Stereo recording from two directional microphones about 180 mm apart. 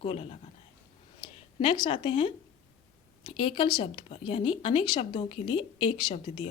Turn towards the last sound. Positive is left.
turn(degrees=25)  # may be behind; listen again after turning